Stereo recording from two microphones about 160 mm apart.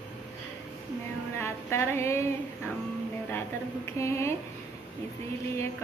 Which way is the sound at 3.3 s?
15° left (ahead or behind).